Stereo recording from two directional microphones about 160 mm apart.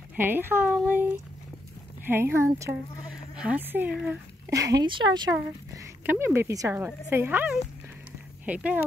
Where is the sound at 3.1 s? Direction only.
5° right (ahead or behind).